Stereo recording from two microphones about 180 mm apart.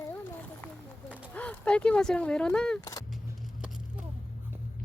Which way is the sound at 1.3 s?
10° left (ahead or behind).